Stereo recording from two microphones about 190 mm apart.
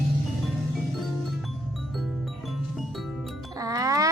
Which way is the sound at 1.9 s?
Centre (ahead or behind).